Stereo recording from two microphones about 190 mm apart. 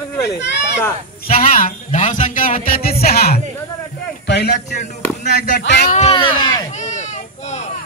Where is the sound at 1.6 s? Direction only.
40° left (ahead or behind); by 4.6 s 65° left (ahead or behind).